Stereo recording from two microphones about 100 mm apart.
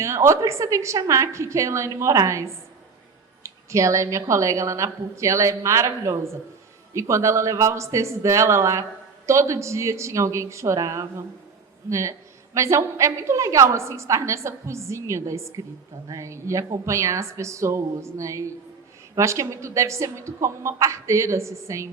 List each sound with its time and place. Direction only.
0.0 s a woman's voice: 30° right (ahead or behind)